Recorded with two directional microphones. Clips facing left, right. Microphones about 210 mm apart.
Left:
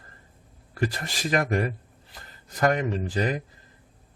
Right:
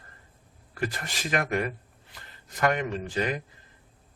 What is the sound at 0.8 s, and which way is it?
Speech, 35° left (ahead or behind).